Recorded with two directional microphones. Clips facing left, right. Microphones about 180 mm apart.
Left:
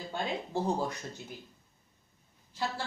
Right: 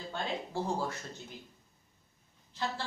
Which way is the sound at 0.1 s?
20° left (ahead or behind).